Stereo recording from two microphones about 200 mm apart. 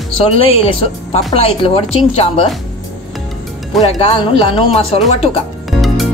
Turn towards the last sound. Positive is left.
turn(degrees=0)  # may be behind; listen again after turning